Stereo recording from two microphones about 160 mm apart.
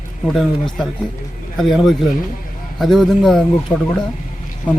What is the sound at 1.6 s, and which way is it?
A man's voice, centre (ahead or behind).